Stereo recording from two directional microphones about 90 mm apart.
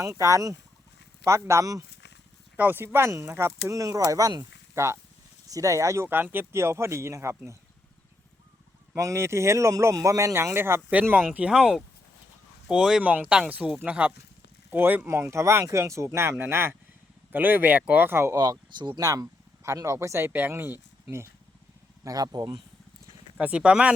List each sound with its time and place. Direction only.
0.0 s speech: 35° right (ahead or behind)
2.6 s speech: 20° right (ahead or behind)
9.0 s speech: 30° right (ahead or behind)
11.3 s speech: 10° right (ahead or behind); by 18.3 s 30° right (ahead or behind)
18.3 s speech: 50° right (ahead or behind)
19.0 s speech: 40° right (ahead or behind)
22.0 s speech: 45° right (ahead or behind)
23.4 s speech: 15° right (ahead or behind)